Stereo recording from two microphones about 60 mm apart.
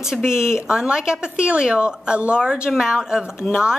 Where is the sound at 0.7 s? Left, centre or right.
Centre.